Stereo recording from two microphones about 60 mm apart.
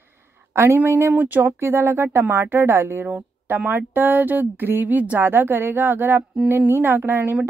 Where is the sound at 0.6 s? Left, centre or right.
Right.